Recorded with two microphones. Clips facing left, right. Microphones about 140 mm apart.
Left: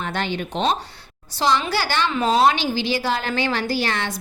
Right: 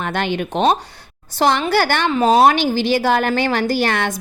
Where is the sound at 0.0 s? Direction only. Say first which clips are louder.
Right 4 dB; 60° right (ahead or behind).